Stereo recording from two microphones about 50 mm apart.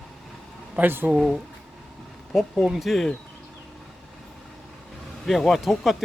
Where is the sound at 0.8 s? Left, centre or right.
Right.